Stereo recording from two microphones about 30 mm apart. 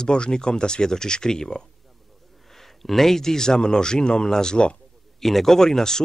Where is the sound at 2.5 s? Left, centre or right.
Centre.